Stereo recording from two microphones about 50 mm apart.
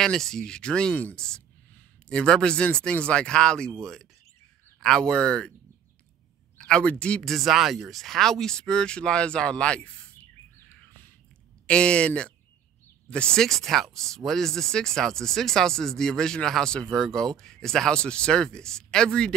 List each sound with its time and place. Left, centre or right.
0.0 s speech: centre
6.6 s speech: centre
7.2 s speech: centre
11.6 s speech: left
13.4 s speech: centre